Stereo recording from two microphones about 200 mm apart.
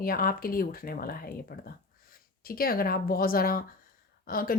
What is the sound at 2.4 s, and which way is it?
Speech, 45° left (ahead or behind).